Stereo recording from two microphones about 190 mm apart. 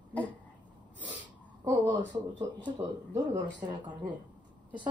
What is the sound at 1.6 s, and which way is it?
Speech, 25° right (ahead or behind).